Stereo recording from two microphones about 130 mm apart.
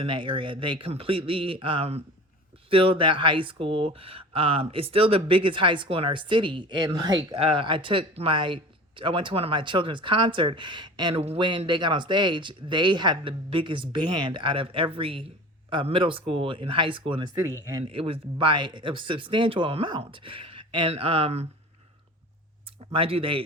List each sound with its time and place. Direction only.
0.0 s speech: 40° right (ahead or behind)
22.9 s speech: 45° right (ahead or behind)